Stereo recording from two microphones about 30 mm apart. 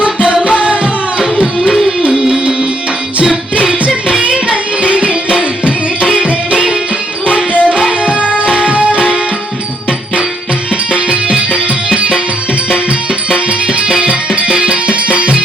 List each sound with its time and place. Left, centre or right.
0.0 s music: right
1.2 s music: right
3.5 s music: right
10.9 s music: right
14.0 s music: right